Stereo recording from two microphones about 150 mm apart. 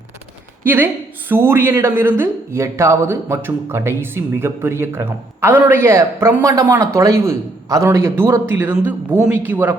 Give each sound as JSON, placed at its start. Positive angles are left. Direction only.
{"t": 0.6, "sound": "a woman's voice", "side_deg": -15}